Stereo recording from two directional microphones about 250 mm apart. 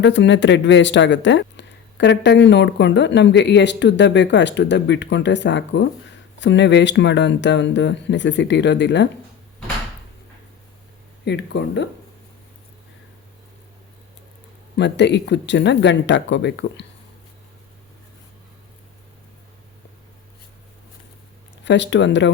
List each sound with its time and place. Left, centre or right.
0.0 s speech: left
11.3 s speech: left
14.8 s speech: left
21.6 s speech: left